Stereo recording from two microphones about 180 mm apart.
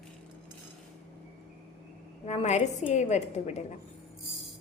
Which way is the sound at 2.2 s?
40° left (ahead or behind).